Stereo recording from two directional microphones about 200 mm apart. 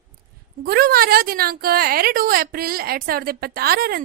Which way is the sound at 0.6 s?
50° right (ahead or behind).